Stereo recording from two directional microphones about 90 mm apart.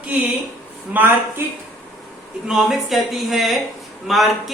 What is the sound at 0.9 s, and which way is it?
Speech, 20° right (ahead or behind).